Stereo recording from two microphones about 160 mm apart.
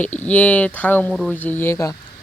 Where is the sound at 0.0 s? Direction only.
10° left (ahead or behind).